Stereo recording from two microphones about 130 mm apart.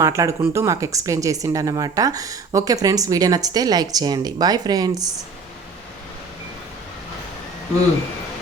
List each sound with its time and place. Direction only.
0.0 s speech: 25° right (ahead or behind)